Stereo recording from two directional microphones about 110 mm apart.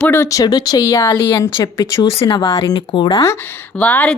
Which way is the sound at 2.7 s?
45° left (ahead or behind).